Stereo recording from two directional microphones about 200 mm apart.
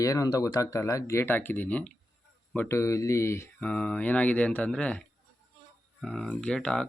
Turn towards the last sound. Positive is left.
turn(degrees=5)  # may be behind; listen again after turning